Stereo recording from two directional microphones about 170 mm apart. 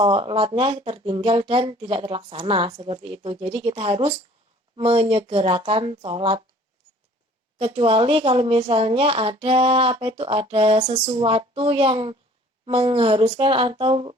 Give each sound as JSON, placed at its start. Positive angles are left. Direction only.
{"t": 0.0, "sound": "speech", "side_deg": -30}
{"t": 7.6, "sound": "speech", "side_deg": -35}